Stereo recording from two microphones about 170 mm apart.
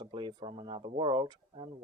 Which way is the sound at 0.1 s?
25° right (ahead or behind).